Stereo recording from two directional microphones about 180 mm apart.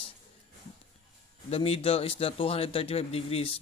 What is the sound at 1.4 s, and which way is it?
Speech, 35° left (ahead or behind).